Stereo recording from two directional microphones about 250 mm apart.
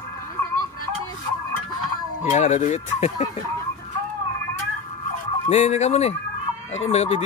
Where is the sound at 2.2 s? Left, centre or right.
Left.